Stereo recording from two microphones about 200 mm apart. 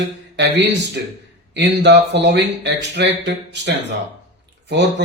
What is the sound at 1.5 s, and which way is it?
Speech, 60° right (ahead or behind).